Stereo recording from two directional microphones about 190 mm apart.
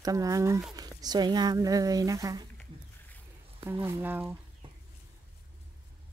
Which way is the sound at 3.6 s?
15° right (ahead or behind).